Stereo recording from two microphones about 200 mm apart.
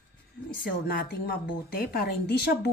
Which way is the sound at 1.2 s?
50° left (ahead or behind).